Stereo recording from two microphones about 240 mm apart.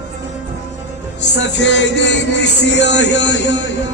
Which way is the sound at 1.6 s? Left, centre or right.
Left.